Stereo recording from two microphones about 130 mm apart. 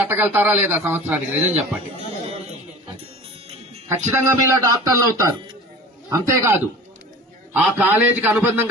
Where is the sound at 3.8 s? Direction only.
20° right (ahead or behind).